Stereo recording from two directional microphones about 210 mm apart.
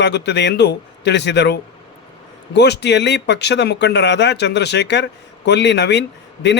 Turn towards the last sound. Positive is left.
turn(degrees=55)  # may be behind; listen again after turning